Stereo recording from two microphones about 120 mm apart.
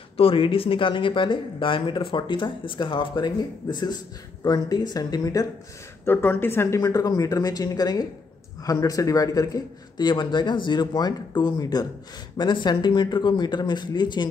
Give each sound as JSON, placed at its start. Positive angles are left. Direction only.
{"t": 0.2, "sound": "speech", "side_deg": 50}
{"t": 6.0, "sound": "a man's voice", "side_deg": 20}